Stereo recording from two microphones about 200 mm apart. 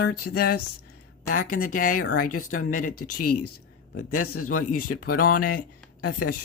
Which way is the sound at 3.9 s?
90° left.